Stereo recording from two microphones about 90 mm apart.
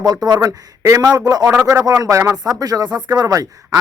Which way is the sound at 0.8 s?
30° right (ahead or behind).